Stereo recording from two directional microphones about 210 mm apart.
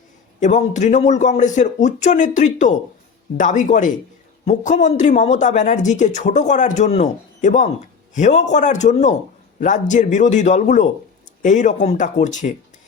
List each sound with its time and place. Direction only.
0.3 s a man's voice: 35° left (ahead or behind)